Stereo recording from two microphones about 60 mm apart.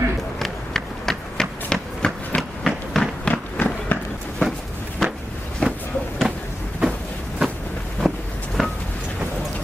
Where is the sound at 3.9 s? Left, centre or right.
Left.